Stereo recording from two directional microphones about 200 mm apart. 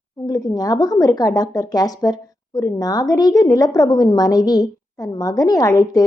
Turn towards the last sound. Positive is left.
turn(degrees=20)  # may be behind; listen again after turning